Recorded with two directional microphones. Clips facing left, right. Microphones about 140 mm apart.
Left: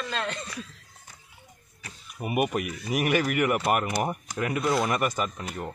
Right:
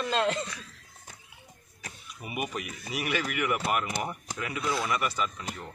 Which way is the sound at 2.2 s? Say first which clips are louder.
Left 8 dB; 55° left (ahead or behind).